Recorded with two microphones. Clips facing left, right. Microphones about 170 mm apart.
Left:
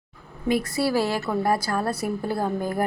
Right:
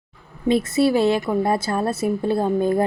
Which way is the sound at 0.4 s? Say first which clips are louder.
Right 5 dB; 25° right (ahead or behind).